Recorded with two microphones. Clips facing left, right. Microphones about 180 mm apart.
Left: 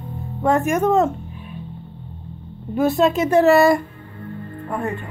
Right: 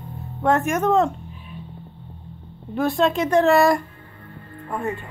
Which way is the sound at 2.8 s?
5° left (ahead or behind).